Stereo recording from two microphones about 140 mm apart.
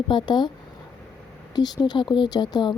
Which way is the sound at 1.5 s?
30° left (ahead or behind).